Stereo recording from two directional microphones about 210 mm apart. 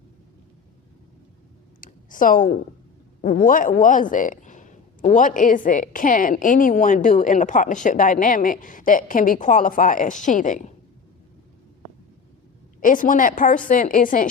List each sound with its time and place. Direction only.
1.8 s a sound: 40° left (ahead or behind)
3.2 s speech: 40° left (ahead or behind)
12.8 s speech: 40° left (ahead or behind)